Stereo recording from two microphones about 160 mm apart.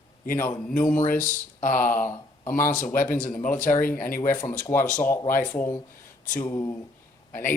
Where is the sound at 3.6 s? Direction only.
55° left (ahead or behind).